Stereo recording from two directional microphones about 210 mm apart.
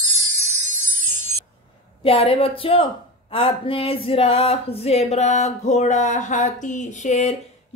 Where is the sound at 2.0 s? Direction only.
25° left (ahead or behind).